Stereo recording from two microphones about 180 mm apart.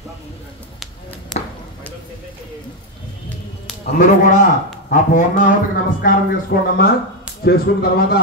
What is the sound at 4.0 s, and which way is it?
Speech, 45° left (ahead or behind).